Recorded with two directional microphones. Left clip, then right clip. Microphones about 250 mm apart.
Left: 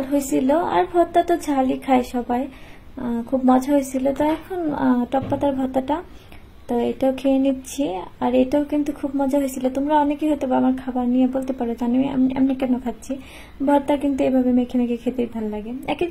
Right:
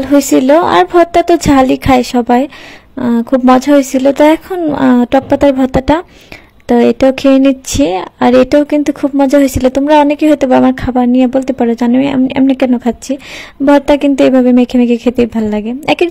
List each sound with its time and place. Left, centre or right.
0.3 s speech: right